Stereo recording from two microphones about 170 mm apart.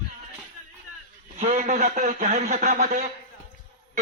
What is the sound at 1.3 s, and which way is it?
A man's voice, 45° right (ahead or behind).